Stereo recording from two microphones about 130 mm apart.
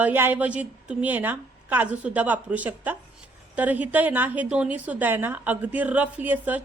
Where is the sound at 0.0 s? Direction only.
15° right (ahead or behind).